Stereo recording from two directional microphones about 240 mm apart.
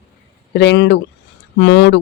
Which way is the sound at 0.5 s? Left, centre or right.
Left.